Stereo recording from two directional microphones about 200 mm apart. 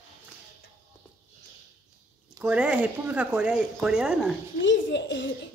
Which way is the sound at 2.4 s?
5° right (ahead or behind).